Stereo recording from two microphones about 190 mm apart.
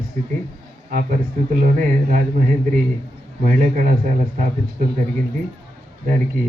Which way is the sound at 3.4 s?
50° right (ahead or behind).